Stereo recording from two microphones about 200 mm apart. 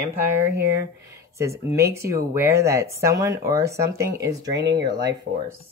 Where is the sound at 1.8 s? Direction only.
15° right (ahead or behind).